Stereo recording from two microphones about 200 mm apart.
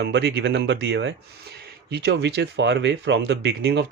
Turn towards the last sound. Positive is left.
turn(degrees=-60)  # may be behind; listen again after turning